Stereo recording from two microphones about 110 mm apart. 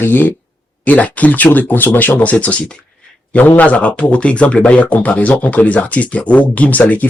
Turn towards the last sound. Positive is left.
turn(degrees=15)  # may be behind; listen again after turning